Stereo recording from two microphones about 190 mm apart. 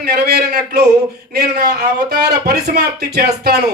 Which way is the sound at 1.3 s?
55° right (ahead or behind).